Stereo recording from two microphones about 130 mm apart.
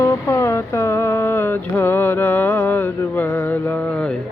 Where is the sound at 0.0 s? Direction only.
20° left (ahead or behind).